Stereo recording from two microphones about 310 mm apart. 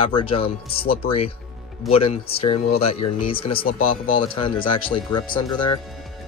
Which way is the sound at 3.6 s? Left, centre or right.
Left.